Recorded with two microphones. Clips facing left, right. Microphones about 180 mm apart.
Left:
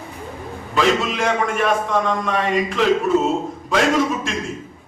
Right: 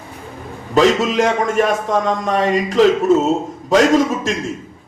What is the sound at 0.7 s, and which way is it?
A man's voice, 40° right (ahead or behind).